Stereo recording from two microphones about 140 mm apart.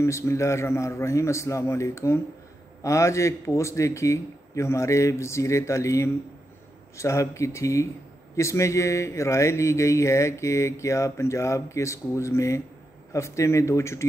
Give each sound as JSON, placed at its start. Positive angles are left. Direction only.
{"t": 0.0, "sound": "speech", "side_deg": 20}